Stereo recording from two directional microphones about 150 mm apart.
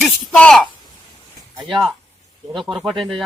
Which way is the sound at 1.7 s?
Centre (ahead or behind).